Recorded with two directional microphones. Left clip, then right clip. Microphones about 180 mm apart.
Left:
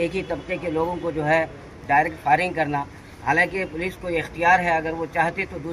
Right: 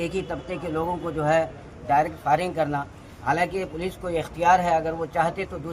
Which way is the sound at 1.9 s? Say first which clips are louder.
Left 2 dB; 20° right (ahead or behind).